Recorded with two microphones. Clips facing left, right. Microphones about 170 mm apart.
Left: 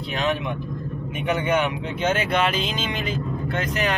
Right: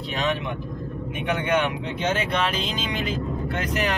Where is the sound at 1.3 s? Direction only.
5° left (ahead or behind).